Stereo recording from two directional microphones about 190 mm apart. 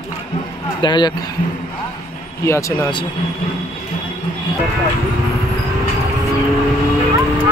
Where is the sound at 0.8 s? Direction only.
25° left (ahead or behind).